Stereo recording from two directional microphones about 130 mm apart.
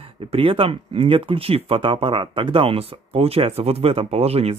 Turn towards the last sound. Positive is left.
turn(degrees=-50)  # may be behind; listen again after turning